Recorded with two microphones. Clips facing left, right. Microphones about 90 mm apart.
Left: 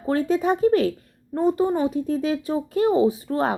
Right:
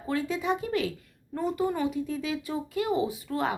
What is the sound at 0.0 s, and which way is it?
Speech, 40° left (ahead or behind).